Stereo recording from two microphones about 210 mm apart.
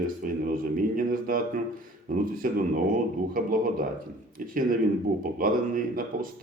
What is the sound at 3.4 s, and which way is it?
Speech, 40° right (ahead or behind).